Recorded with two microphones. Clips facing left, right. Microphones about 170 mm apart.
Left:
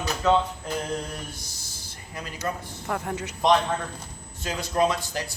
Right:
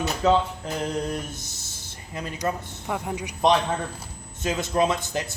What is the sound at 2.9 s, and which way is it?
A man's voice, 10° right (ahead or behind).